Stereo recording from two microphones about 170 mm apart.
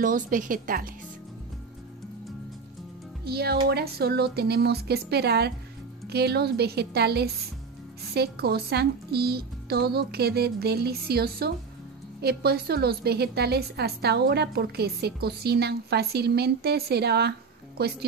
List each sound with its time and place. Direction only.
0.0 s a woman's voice: 50° right (ahead or behind)
3.3 s a woman's voice: 70° right (ahead or behind)